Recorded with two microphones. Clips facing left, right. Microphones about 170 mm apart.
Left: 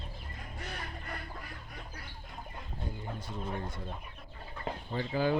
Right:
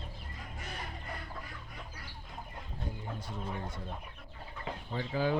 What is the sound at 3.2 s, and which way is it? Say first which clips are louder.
Speech: left 2 dB; 10° right (ahead or behind).